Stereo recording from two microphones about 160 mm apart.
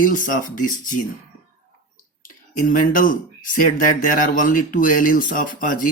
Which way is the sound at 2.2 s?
55° left (ahead or behind).